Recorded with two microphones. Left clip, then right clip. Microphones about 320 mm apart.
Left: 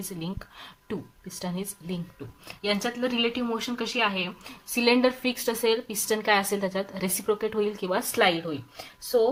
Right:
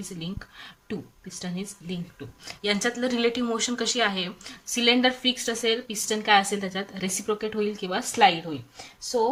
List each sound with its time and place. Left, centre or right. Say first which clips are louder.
0.0 s speech: left 1 dB; centre